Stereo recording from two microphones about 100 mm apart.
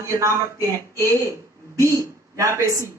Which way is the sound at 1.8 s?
30° right (ahead or behind).